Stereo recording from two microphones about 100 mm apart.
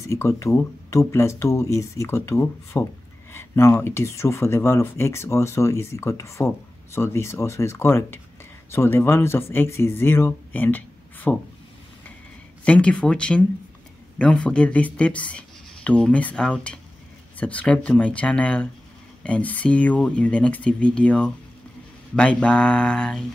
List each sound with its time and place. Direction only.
0.0 s speech: 30° left (ahead or behind)
12.6 s speech: 10° left (ahead or behind)